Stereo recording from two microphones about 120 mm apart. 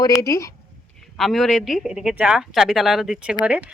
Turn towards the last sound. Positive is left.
turn(degrees=-5)  # may be behind; listen again after turning